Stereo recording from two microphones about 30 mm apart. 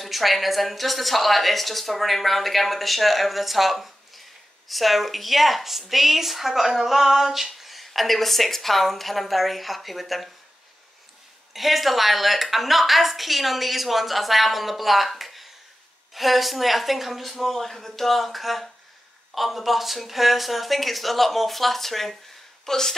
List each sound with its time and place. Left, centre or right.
0.0 s a woman's voice: centre
11.5 s a woman's voice: centre